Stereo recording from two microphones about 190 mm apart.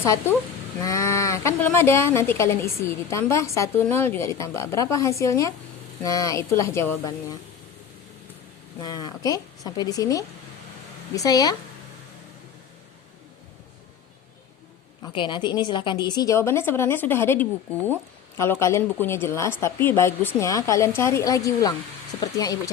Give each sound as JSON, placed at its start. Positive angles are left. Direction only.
{"t": 0.0, "sound": "speech", "side_deg": 15}
{"t": 8.8, "sound": "a woman's voice", "side_deg": 20}
{"t": 15.0, "sound": "a woman's voice", "side_deg": 25}